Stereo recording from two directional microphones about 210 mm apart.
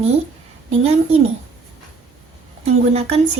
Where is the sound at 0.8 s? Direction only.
30° right (ahead or behind).